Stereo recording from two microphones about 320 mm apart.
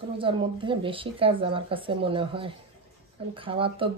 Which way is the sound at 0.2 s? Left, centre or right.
Centre.